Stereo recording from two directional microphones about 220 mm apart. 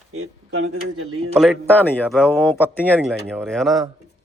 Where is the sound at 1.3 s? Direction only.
Centre (ahead or behind).